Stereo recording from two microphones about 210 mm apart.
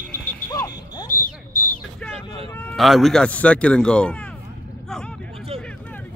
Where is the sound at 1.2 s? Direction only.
90° left.